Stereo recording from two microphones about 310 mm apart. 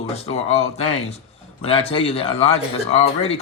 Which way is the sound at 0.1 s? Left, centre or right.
Left.